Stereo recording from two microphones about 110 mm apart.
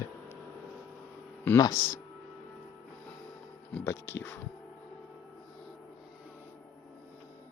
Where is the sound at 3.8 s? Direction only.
20° left (ahead or behind).